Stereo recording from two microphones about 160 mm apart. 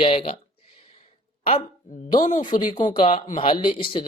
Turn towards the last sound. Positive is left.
turn(degrees=30)  # may be behind; listen again after turning